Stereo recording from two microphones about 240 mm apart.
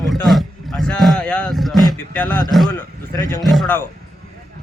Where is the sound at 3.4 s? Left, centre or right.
Centre.